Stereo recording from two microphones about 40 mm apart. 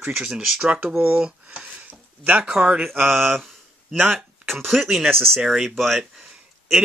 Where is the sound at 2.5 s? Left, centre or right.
Right.